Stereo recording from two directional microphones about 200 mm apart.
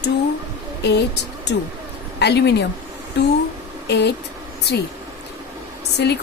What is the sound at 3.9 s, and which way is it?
Speech, 55° left (ahead or behind).